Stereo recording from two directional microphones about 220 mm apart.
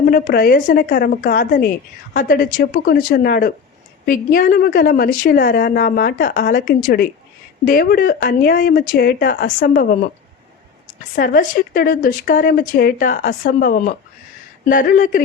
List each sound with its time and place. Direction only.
0.1 s a woman's voice: 40° left (ahead or behind)
11.1 s a woman's voice: 40° left (ahead or behind)